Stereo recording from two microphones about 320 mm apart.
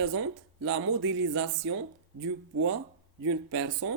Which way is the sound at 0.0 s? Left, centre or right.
Right.